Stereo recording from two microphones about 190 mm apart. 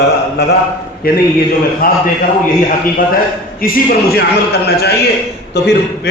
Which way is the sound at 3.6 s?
50° left (ahead or behind).